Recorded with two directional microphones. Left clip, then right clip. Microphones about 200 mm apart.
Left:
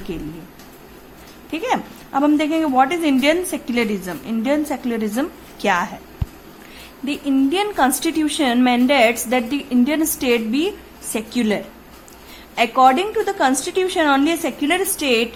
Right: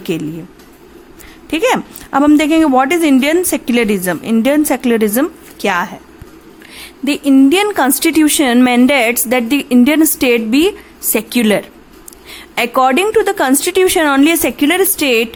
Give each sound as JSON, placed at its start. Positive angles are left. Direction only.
{"t": 0.1, "sound": "a woman's voice", "side_deg": -40}
{"t": 1.5, "sound": "a woman's voice", "side_deg": -40}
{"t": 5.5, "sound": "a woman's voice", "side_deg": -25}
{"t": 7.0, "sound": "a woman's voice", "side_deg": -35}